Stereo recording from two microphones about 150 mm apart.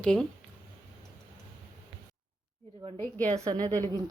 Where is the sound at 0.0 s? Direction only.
5° left (ahead or behind).